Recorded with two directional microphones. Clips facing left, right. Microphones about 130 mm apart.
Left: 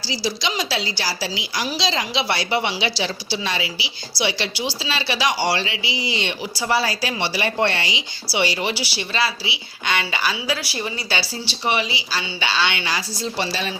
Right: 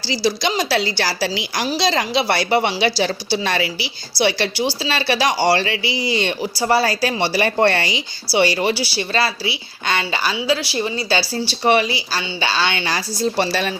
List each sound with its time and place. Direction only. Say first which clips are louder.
0.0 s a woman's voice: right 5 dB; 60° right (ahead or behind)